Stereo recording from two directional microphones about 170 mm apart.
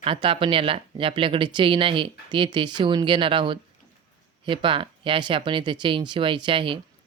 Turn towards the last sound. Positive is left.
turn(degrees=-30)  # may be behind; listen again after turning